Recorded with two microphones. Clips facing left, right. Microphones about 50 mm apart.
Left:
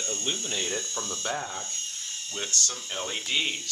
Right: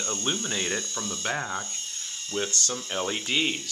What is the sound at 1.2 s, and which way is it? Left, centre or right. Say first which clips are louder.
Speech: right 4 dB; right.